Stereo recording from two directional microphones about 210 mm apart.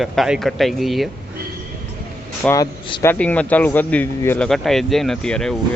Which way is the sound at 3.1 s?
5° left (ahead or behind).